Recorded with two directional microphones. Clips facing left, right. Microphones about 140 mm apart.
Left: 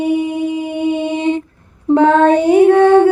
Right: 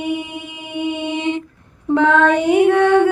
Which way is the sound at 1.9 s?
35° left (ahead or behind).